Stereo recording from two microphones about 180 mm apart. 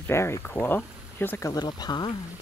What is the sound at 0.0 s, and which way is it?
Speech, 15° left (ahead or behind).